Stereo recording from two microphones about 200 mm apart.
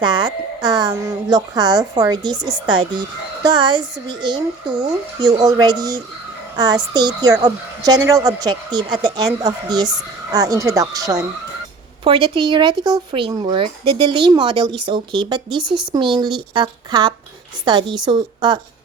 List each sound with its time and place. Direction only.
0.0 s a woman's voice: 25° right (ahead or behind)